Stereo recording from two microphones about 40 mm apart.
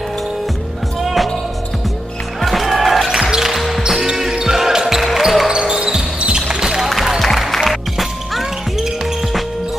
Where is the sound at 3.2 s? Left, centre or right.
Centre.